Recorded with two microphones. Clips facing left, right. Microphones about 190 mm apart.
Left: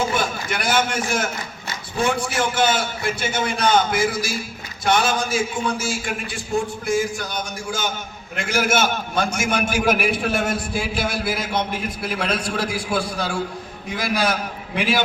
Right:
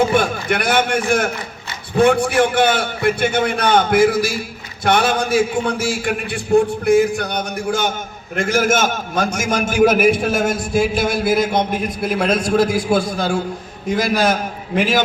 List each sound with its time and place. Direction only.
0.0 s a man's voice: 60° right (ahead or behind)
8.4 s a man's voice: 50° right (ahead or behind)